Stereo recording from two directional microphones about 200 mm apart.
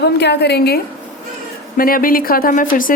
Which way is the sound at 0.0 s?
55° left (ahead or behind).